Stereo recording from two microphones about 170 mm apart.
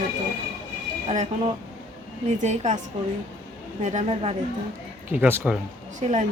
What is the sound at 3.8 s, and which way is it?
Speech, 40° right (ahead or behind).